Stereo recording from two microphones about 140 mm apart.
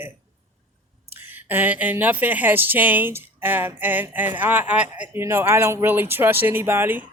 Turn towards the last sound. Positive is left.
turn(degrees=-15)  # may be behind; listen again after turning